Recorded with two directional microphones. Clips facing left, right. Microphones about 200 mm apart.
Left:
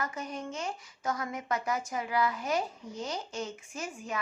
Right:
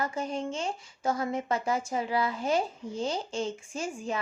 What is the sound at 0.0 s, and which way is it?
Speech, 30° right (ahead or behind).